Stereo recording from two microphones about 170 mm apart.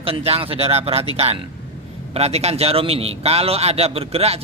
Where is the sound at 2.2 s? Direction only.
40° right (ahead or behind).